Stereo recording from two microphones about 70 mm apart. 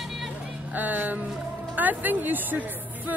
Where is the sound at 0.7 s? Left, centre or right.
Right.